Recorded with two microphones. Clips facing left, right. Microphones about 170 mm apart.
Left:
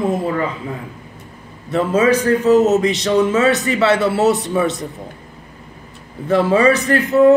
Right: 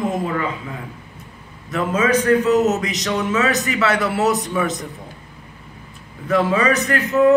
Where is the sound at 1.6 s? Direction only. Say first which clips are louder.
Left 5 dB; 30° left (ahead or behind).